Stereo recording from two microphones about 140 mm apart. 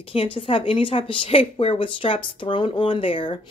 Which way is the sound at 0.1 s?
40° left (ahead or behind).